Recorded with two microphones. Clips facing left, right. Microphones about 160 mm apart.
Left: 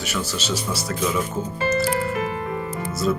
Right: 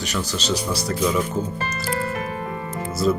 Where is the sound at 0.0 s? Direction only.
5° left (ahead or behind).